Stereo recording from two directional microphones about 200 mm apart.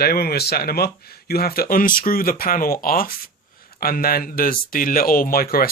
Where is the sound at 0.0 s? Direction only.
50° left (ahead or behind).